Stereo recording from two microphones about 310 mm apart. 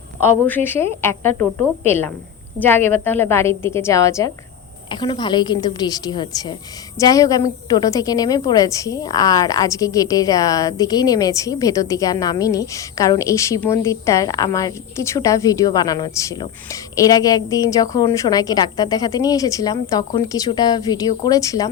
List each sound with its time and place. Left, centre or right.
0.4 s a woman's voice: centre